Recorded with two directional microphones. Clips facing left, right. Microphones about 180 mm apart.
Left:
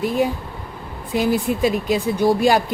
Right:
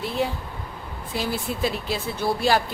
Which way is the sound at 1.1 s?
15° left (ahead or behind).